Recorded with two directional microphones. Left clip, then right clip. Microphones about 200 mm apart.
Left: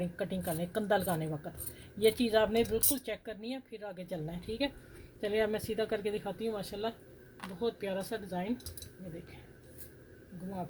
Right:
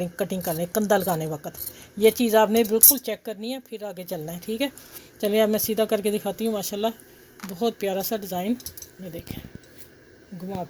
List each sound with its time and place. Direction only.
0.0 s speech: 35° right (ahead or behind); by 8.5 s 50° right (ahead or behind)